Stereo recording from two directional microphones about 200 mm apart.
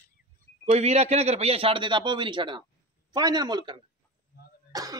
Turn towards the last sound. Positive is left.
turn(degrees=-20)  # may be behind; listen again after turning